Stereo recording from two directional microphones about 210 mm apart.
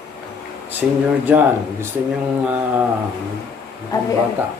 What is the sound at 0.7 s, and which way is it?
Speech, 10° right (ahead or behind).